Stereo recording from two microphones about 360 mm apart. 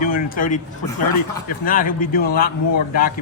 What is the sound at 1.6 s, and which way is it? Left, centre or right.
Speech, left.